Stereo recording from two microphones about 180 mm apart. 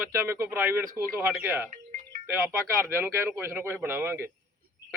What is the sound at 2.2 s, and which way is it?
Speech, 10° right (ahead or behind).